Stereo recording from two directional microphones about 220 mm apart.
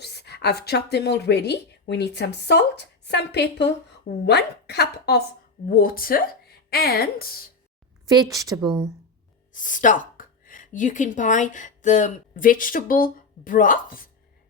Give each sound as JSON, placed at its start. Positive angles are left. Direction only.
{"t": 0.0, "sound": "a woman's voice", "side_deg": 50}
{"t": 8.0, "sound": "speech", "side_deg": -15}
{"t": 9.5, "sound": "speech", "side_deg": 35}